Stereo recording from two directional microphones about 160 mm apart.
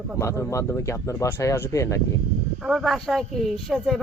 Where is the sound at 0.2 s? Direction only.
20° left (ahead or behind).